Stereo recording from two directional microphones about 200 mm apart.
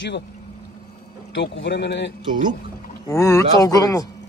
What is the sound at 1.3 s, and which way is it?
Speech, 60° left (ahead or behind).